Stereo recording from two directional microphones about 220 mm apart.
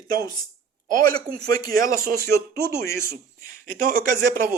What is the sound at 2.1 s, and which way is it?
Speech, 10° left (ahead or behind).